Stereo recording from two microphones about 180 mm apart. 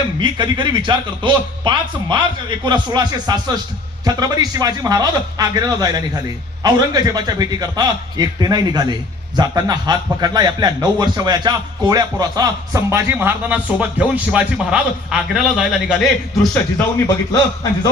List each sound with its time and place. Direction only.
0.2 s speech: 25° right (ahead or behind); by 16.8 s centre (ahead or behind)